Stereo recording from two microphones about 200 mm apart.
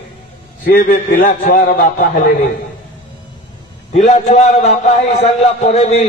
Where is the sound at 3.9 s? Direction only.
35° left (ahead or behind).